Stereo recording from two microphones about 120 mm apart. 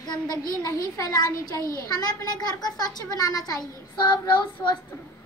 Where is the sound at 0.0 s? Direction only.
35° left (ahead or behind).